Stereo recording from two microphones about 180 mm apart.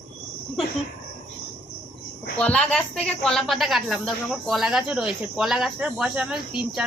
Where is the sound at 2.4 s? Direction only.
5° left (ahead or behind).